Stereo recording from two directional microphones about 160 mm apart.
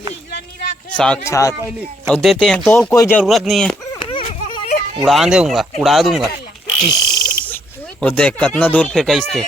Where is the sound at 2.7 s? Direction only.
20° left (ahead or behind).